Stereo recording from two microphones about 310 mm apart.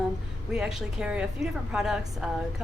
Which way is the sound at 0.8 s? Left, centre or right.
Centre.